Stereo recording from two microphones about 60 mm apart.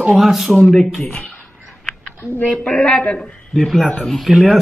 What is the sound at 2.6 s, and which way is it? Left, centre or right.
Speech, centre.